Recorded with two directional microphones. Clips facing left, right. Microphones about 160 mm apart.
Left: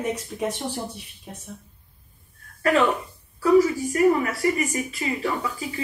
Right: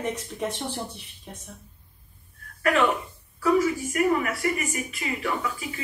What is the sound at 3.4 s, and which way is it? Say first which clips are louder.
A woman's voice: left 4 dB; 35° left (ahead or behind).